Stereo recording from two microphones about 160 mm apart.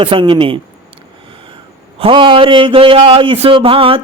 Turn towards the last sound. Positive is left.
turn(degrees=-35)  # may be behind; listen again after turning